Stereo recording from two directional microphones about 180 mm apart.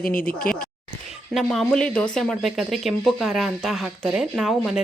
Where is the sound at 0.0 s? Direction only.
50° left (ahead or behind).